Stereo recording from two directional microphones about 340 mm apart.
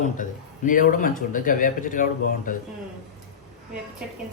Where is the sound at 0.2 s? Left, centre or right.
Left.